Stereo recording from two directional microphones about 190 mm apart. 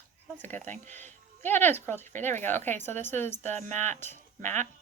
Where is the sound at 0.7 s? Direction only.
40° right (ahead or behind).